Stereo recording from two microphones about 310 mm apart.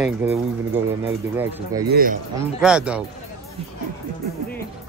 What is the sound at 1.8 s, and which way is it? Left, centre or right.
Speech, right.